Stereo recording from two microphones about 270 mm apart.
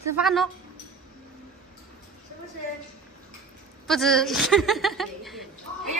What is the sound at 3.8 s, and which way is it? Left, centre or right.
A woman's voice, centre.